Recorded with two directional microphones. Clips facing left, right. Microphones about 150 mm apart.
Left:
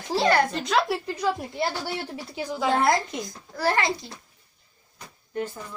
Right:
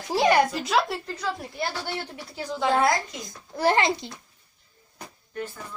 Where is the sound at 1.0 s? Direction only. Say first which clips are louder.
Left 4 dB; 10° left (ahead or behind).